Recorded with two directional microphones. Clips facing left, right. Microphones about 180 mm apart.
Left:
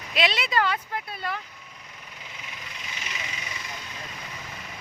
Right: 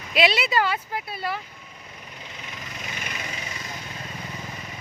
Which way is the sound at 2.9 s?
55° right (ahead or behind).